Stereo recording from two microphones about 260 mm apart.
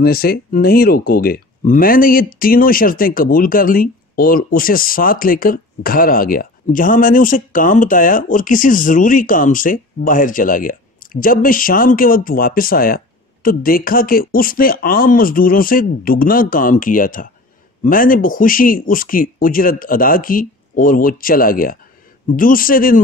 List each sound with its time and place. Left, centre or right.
0.0 s speech: left